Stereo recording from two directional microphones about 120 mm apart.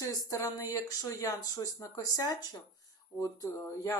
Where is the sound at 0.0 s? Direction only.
25° left (ahead or behind).